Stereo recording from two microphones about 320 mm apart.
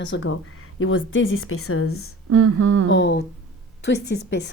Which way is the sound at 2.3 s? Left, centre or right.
Right.